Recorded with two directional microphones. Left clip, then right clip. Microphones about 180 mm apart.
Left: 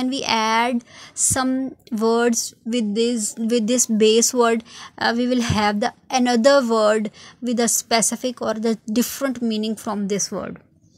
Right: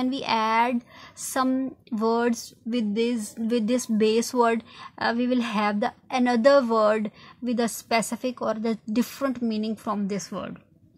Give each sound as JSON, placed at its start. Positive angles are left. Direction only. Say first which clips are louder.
{"t": 0.0, "sound": "speech", "louder": "left 4 dB", "side_deg": 20}